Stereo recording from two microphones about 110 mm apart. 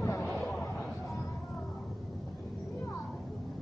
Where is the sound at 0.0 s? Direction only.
25° left (ahead or behind).